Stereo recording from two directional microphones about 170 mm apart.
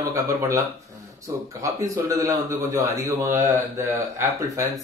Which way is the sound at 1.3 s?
20° right (ahead or behind).